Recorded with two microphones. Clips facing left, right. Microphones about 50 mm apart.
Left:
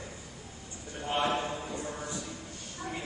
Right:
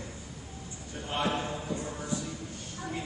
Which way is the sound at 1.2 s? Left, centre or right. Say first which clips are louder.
Left 1 dB; centre.